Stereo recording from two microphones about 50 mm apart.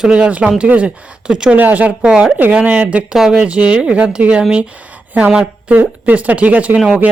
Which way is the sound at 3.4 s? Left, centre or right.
Right.